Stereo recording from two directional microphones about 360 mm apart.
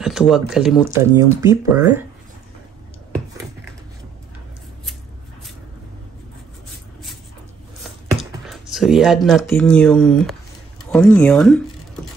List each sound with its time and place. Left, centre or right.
0.0 s speech: centre
7.8 s computer keyboard: centre
10.9 s a sound: centre